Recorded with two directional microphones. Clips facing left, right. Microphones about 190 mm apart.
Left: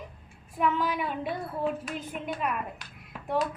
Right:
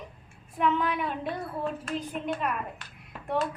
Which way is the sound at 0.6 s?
Centre (ahead or behind).